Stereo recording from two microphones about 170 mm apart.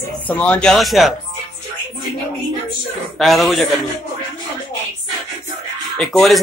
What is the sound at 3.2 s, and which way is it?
Speech, centre (ahead or behind).